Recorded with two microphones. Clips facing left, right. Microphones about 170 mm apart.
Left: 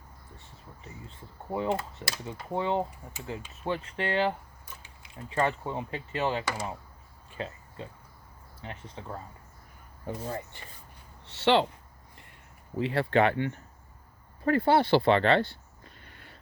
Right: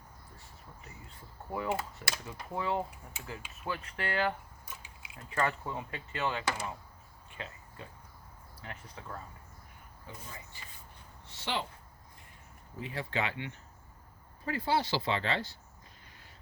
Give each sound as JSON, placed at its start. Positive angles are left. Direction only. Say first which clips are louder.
{"t": 1.5, "sound": "speech", "louder": "left 5 dB", "side_deg": 25}
{"t": 7.3, "sound": "a sound", "louder": "left 8 dB", "side_deg": 35}
{"t": 8.6, "sound": "speech", "louder": "left 5 dB", "side_deg": 30}
{"t": 10.1, "sound": "speech", "louder": "left 14 dB", "side_deg": 55}
{"t": 11.3, "sound": "speech", "louder": "left 13 dB", "side_deg": 70}
{"t": 12.7, "sound": "speech", "louder": "left 11 dB", "side_deg": 70}
{"t": 14.4, "sound": "a sound", "louder": "left 8 dB", "side_deg": 60}